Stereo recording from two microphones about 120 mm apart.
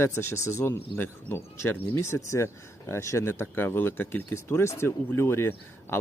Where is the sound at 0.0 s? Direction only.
20° left (ahead or behind).